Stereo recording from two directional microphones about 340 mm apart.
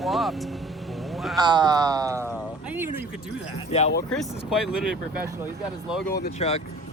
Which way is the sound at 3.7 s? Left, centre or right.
Left.